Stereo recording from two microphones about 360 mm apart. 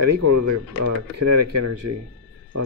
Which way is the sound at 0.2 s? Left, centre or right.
Right.